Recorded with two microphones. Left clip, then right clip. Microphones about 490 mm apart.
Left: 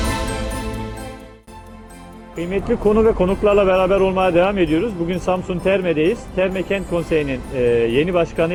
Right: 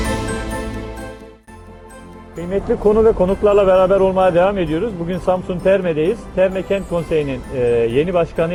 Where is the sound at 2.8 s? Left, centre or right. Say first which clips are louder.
Right 3 dB; right.